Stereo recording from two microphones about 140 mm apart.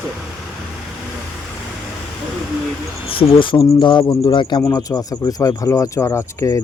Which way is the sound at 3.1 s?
40° left (ahead or behind).